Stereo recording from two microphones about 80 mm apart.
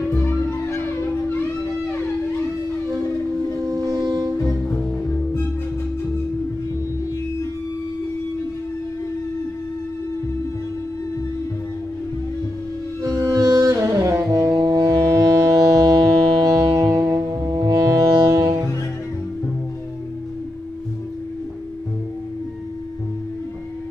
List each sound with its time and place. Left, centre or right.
0.1 s music: left
3.6 s music: right
13.0 s music: right
14.5 s music: right
17.5 s music: right